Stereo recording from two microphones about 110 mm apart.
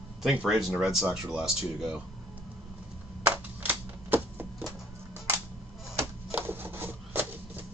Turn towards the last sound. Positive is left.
turn(degrees=-20)  # may be behind; listen again after turning